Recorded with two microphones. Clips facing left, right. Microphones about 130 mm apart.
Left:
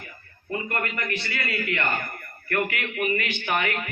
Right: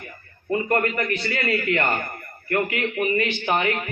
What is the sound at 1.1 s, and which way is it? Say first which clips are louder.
A man's voice: right 6 dB; 30° right (ahead or behind).